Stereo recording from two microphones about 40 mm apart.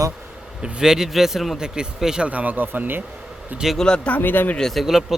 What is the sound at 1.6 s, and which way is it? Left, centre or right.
Speech, centre.